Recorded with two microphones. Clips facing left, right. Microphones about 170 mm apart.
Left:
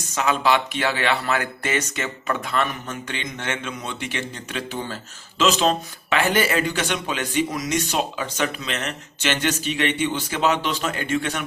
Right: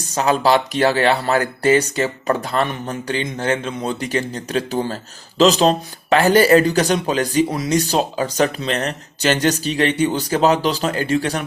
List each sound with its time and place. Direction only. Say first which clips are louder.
0.1 s speech: right 5 dB; 35° right (ahead or behind)